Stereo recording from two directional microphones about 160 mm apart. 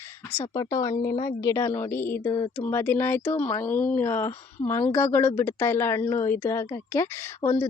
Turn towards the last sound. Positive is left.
turn(degrees=15)  # may be behind; listen again after turning